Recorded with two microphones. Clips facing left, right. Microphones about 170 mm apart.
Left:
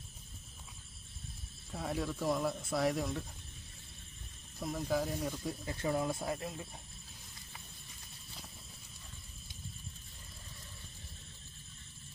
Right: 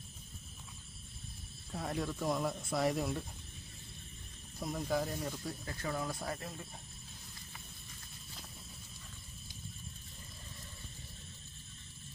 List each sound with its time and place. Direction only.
1.7 s speech: centre (ahead or behind)
4.6 s speech: centre (ahead or behind)
5.4 s speech: 20° left (ahead or behind)